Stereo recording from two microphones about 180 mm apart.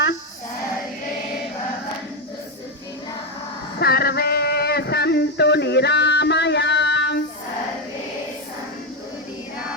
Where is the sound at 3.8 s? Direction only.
60° left (ahead or behind).